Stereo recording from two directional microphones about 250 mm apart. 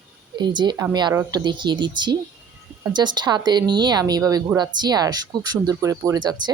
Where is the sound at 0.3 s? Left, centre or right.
Centre.